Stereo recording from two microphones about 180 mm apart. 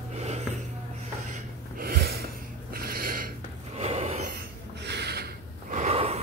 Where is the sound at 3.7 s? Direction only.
35° right (ahead or behind).